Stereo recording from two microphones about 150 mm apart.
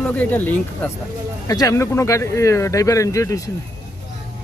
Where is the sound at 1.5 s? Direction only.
20° left (ahead or behind).